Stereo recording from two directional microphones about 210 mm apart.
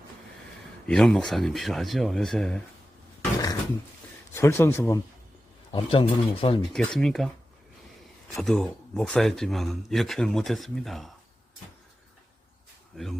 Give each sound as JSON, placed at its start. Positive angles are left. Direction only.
{"t": 0.9, "sound": "speech", "side_deg": 5}
{"t": 4.4, "sound": "speech", "side_deg": 10}
{"t": 5.7, "sound": "speech", "side_deg": 25}
{"t": 6.6, "sound": "speech", "side_deg": 0}
{"t": 8.4, "sound": "speech", "side_deg": 0}